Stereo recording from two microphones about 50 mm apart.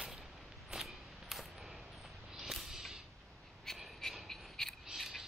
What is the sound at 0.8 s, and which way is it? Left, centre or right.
Coin, centre.